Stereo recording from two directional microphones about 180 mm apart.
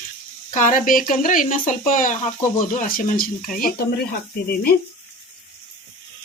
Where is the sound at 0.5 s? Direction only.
45° left (ahead or behind).